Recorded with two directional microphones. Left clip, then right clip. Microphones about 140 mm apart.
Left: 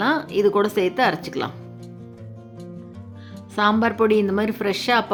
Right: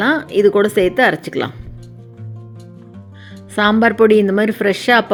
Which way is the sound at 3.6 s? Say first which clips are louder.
Right 7 dB; 30° right (ahead or behind).